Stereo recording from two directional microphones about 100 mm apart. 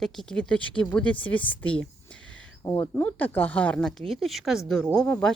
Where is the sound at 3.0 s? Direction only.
15° left (ahead or behind).